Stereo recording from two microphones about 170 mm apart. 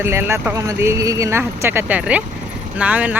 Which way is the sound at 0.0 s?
15° right (ahead or behind).